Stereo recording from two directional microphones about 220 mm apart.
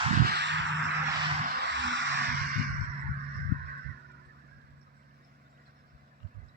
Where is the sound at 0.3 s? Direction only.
50° right (ahead or behind).